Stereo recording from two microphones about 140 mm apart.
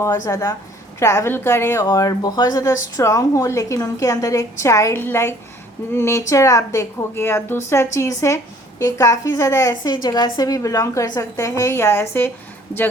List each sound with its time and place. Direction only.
0.0 s a woman's voice: 20° left (ahead or behind)